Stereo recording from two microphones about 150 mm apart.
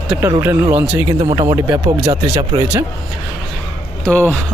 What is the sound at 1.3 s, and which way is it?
Speech, 25° right (ahead or behind).